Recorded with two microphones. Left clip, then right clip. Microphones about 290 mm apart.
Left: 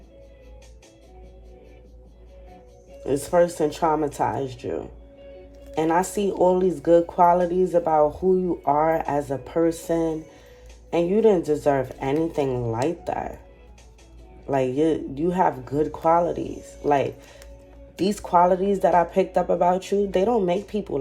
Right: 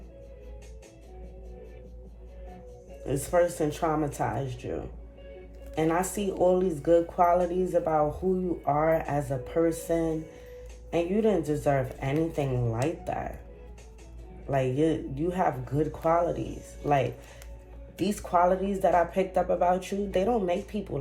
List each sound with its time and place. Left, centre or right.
3.1 s speech: left
11.1 s speech: left
14.5 s speech: left
17.9 s speech: left